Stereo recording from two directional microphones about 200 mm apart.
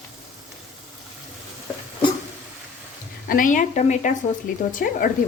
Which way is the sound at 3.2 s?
45° left (ahead or behind).